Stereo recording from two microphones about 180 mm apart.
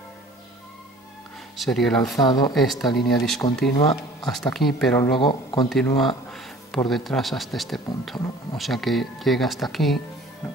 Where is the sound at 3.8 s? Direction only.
20° left (ahead or behind).